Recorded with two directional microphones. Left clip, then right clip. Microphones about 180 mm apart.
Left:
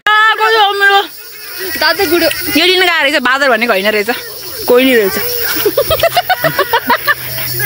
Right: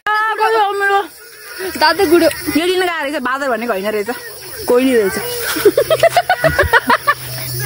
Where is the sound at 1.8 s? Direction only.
50° right (ahead or behind).